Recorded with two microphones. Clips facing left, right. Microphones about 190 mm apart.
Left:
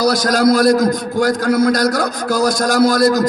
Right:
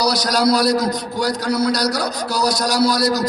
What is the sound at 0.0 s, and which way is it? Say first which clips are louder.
A man's voice: left 4 dB; 50° left (ahead or behind).